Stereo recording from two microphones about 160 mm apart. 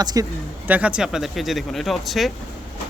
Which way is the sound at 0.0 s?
25° right (ahead or behind).